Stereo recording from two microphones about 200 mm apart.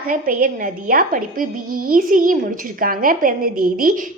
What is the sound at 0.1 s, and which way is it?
A woman's voice, 45° right (ahead or behind).